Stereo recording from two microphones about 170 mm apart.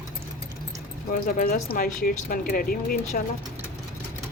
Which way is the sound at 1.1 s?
50° left (ahead or behind).